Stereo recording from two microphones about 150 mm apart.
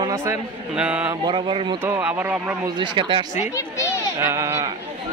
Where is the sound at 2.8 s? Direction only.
30° right (ahead or behind).